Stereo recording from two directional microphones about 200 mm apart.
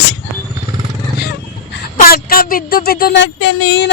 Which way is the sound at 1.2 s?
50° left (ahead or behind).